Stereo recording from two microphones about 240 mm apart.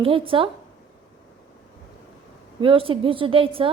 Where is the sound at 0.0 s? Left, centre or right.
Right.